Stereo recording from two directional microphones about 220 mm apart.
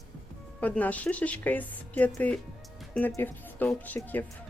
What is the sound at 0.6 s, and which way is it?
Speech, 5° left (ahead or behind).